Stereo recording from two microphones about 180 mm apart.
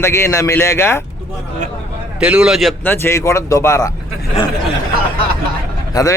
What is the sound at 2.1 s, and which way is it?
Speech, 5° right (ahead or behind).